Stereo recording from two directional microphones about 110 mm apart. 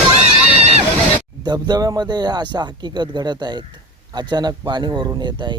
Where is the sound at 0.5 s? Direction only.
70° right (ahead or behind).